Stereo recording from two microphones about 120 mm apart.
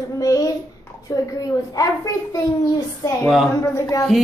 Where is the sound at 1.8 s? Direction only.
30° left (ahead or behind).